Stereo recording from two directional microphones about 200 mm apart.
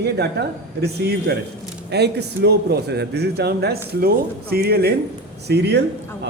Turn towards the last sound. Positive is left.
turn(degrees=-55)  # may be behind; listen again after turning